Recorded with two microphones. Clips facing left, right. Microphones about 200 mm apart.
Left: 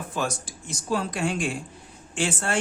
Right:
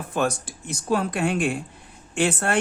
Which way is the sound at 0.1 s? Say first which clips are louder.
Right 6 dB; 60° right (ahead or behind).